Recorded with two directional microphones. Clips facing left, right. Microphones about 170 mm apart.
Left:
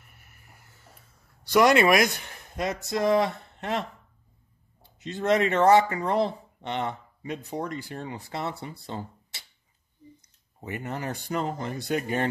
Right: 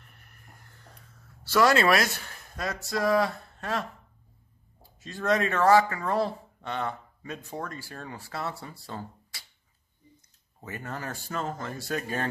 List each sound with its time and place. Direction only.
0.0 s a sound: 5° left (ahead or behind)
1.5 s speech: 20° left (ahead or behind)
5.0 s speech: 20° left (ahead or behind)
10.6 s speech: 20° left (ahead or behind)